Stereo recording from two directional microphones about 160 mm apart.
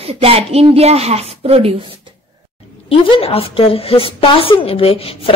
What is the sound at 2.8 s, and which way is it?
A woman's voice, 35° left (ahead or behind).